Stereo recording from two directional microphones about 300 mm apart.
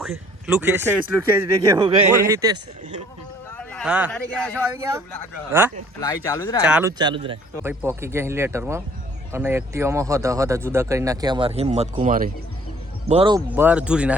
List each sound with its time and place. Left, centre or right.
0.4 s speech: centre
3.7 s speech: centre
5.5 s speech: centre
6.0 s speech: centre
6.7 s speech: centre
7.0 s speech: centre